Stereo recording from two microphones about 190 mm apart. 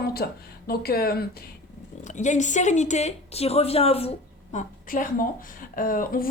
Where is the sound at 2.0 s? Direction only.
40° left (ahead or behind).